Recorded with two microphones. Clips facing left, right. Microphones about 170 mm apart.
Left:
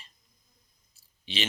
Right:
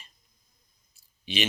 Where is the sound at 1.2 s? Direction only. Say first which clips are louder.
Right 4 dB; 15° right (ahead or behind).